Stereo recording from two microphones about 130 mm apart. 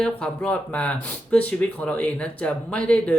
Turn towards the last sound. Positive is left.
turn(degrees=10)  # may be behind; listen again after turning